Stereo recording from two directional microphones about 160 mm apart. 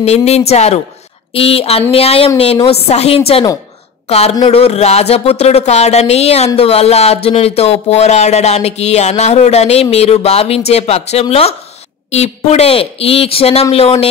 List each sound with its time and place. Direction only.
0.0 s speech: 40° left (ahead or behind)